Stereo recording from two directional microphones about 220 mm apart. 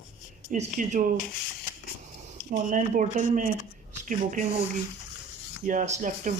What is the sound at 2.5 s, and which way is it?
Speech, 35° right (ahead or behind).